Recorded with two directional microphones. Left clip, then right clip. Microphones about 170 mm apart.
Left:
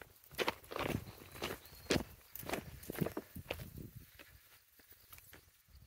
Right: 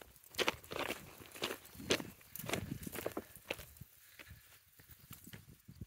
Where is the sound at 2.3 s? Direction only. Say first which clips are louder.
Right 1 dB; 15° right (ahead or behind).